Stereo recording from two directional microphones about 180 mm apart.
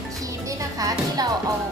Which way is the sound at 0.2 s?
20° right (ahead or behind).